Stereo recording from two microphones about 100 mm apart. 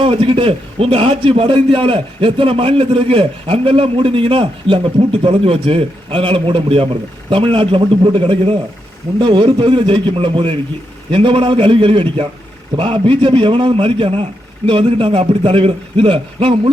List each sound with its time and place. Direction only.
0.0 s a man's voice: 65° right (ahead or behind)
9.1 s a man's voice: 55° right (ahead or behind)